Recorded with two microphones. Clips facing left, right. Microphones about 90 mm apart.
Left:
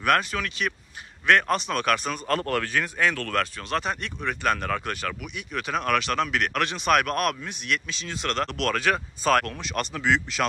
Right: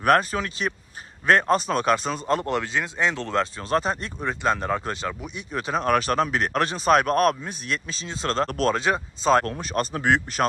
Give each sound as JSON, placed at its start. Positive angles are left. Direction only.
{"t": 0.0, "sound": "a man's voice", "side_deg": -35}
{"t": 9.6, "sound": "speech", "side_deg": -35}
{"t": 10.0, "sound": "speech", "side_deg": -50}